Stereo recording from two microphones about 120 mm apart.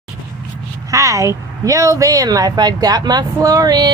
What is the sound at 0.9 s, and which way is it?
Speech, 25° right (ahead or behind).